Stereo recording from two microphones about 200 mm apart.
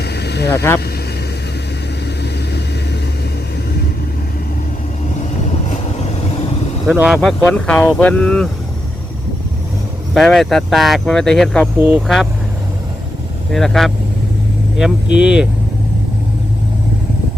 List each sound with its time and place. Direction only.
0.0 s vehicle: 55° left (ahead or behind)
0.5 s speech: 15° left (ahead or behind)
5.6 s vehicle: 35° left (ahead or behind)
6.8 s speech: 5° right (ahead or behind)
10.2 s speech: centre (ahead or behind)
11.8 s speech: 10° right (ahead or behind)
12.0 s speech: centre (ahead or behind)
13.5 s speech: centre (ahead or behind)